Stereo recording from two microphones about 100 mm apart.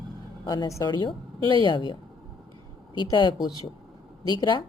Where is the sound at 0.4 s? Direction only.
45° left (ahead or behind).